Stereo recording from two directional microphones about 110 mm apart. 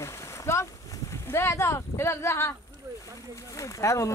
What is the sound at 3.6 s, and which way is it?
Speech, 30° left (ahead or behind).